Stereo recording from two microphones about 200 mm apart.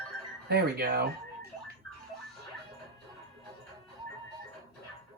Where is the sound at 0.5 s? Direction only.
50° right (ahead or behind).